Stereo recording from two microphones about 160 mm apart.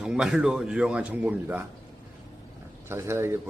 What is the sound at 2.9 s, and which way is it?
Speech, 15° right (ahead or behind).